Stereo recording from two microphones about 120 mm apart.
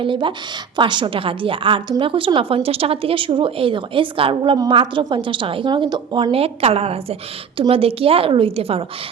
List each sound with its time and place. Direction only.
0.0 s a woman's voice: 45° right (ahead or behind)
6.3 s a woman's voice: 55° right (ahead or behind)